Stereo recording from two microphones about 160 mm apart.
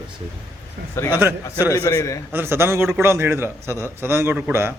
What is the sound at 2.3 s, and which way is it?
A man's voice, 15° right (ahead or behind).